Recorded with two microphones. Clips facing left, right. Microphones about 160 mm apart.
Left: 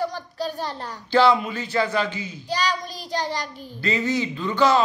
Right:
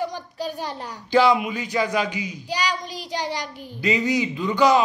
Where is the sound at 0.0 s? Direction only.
15° right (ahead or behind).